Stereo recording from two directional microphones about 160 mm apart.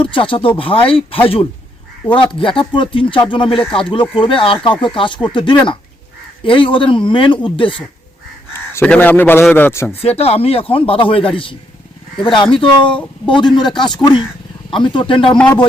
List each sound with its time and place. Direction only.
0.0 s speech: 30° left (ahead or behind)
8.7 s a man's voice: 10° left (ahead or behind)
10.0 s speech: 40° left (ahead or behind)